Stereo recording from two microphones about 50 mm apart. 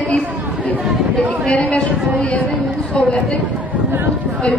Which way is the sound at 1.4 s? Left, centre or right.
Left.